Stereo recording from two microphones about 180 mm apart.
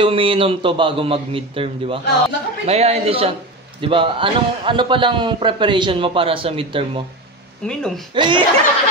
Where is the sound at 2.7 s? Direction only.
35° right (ahead or behind).